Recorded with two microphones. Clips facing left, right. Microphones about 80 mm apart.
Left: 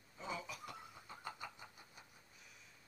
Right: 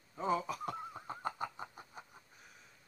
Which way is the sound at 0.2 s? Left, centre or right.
Right.